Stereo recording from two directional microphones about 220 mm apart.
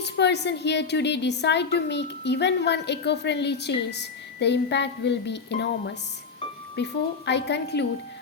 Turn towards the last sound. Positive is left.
turn(degrees=50)  # may be behind; listen again after turning